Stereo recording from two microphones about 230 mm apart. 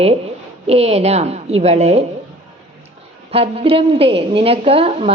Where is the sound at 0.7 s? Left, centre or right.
Right.